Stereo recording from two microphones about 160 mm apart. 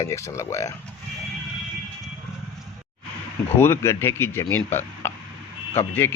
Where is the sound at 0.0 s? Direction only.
20° left (ahead or behind).